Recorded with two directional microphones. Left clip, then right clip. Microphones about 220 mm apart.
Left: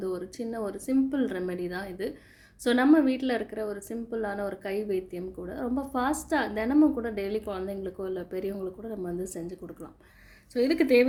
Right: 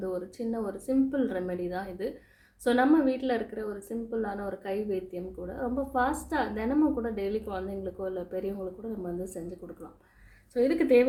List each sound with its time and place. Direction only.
0.0 s a woman's voice: 40° left (ahead or behind)
10.5 s a woman's voice: 45° left (ahead or behind)